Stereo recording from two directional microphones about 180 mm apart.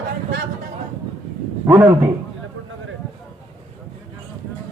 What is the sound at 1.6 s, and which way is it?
Speech, 15° right (ahead or behind).